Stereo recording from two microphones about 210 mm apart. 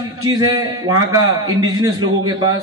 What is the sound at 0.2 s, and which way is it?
A man's voice, 15° right (ahead or behind).